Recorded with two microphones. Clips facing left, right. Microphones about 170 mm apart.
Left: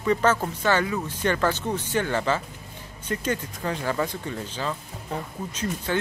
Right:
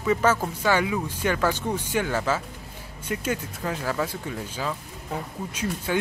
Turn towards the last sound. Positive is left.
turn(degrees=-10)  # may be behind; listen again after turning